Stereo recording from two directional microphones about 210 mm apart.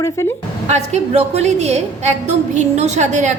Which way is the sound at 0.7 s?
30° right (ahead or behind).